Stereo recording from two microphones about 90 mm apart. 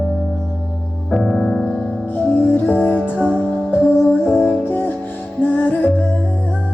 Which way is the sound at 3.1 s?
10° right (ahead or behind).